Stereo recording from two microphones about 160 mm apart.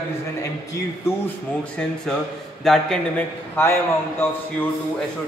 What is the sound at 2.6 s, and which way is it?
A man's voice, 5° left (ahead or behind).